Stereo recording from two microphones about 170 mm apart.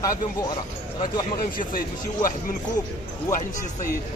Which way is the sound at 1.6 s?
55° left (ahead or behind).